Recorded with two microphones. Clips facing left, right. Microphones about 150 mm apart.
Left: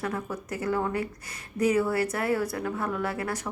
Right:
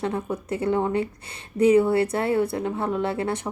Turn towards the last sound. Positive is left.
turn(degrees=-25)  # may be behind; listen again after turning